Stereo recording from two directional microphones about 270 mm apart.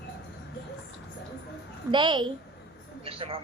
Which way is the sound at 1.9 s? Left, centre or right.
Centre.